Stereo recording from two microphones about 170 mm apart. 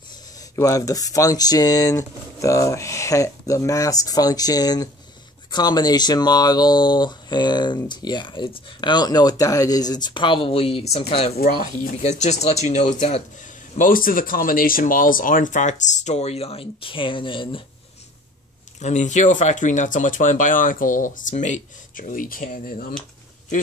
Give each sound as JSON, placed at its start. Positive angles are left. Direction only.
{"t": 0.4, "sound": "speech", "side_deg": 20}
{"t": 11.3, "sound": "speech", "side_deg": 60}
{"t": 12.0, "sound": "speech", "side_deg": 40}
{"t": 13.7, "sound": "speech", "side_deg": 55}
{"t": 18.8, "sound": "speech", "side_deg": 45}